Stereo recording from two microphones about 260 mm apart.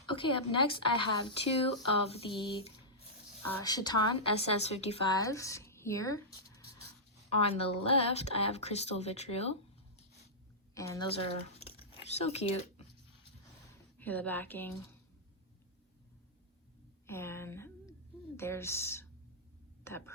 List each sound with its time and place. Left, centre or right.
0.1 s a woman's voice: centre
10.8 s a woman's voice: centre
11.6 s a sound: left
12.0 s a woman's voice: left
14.0 s a woman's voice: centre
17.1 s a woman's voice: centre